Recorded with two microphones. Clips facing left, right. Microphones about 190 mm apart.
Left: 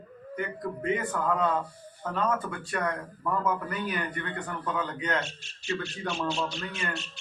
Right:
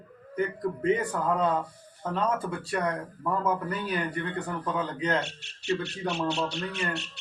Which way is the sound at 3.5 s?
30° right (ahead or behind).